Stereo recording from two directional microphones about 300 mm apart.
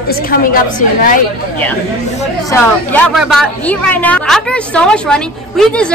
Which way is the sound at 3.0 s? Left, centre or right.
Centre.